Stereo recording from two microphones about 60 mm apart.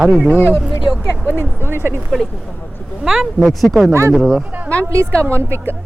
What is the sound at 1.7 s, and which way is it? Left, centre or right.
Speech, right.